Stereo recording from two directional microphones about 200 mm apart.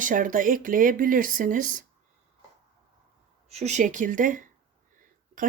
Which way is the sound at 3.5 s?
35° right (ahead or behind).